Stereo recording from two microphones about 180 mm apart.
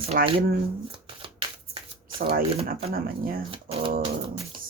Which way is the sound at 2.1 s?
55° right (ahead or behind).